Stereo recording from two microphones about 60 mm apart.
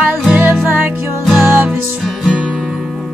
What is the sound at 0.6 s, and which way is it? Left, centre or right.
Music, right.